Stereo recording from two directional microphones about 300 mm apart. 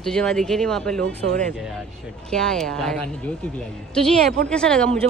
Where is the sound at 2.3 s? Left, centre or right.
Centre.